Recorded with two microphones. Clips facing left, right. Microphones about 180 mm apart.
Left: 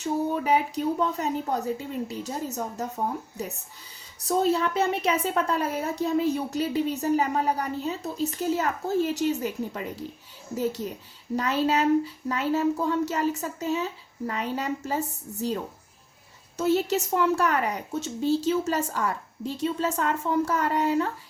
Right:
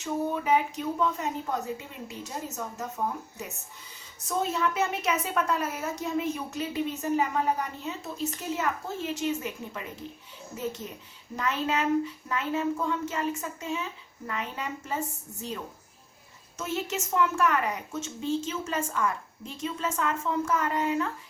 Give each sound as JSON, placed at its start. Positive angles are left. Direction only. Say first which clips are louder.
{"t": 0.0, "sound": "speech", "louder": "left 3 dB", "side_deg": 35}
{"t": 16.6, "sound": "speech", "louder": "left 9 dB", "side_deg": 35}